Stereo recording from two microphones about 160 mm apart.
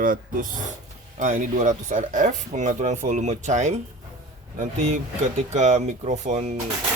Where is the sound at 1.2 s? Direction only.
50° right (ahead or behind).